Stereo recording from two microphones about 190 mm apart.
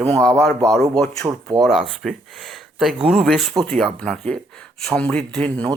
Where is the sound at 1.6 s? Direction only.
Centre (ahead or behind).